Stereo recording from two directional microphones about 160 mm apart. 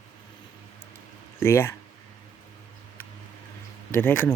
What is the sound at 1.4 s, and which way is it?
Speech, 15° left (ahead or behind).